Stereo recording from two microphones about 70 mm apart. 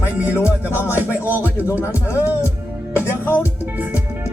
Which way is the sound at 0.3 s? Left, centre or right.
Left.